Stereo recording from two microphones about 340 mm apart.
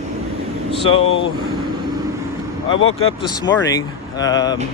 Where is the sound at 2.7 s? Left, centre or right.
Left.